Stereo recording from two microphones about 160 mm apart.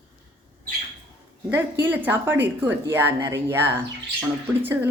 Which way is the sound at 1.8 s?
10° right (ahead or behind).